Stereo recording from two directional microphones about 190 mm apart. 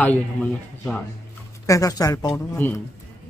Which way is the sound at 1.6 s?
15° left (ahead or behind).